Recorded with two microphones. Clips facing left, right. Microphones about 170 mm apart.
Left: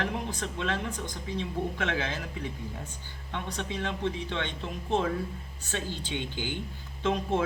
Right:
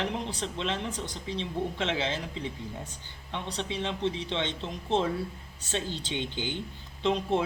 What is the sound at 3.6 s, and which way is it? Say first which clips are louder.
Speech: right 1 dB; 20° right (ahead or behind).